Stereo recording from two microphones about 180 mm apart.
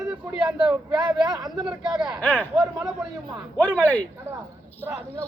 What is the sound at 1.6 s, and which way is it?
Speech, 5° right (ahead or behind).